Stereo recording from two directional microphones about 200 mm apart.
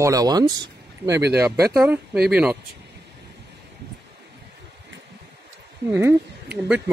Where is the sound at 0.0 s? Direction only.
20° right (ahead or behind).